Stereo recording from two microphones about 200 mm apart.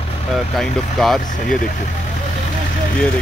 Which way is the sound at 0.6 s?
Centre (ahead or behind).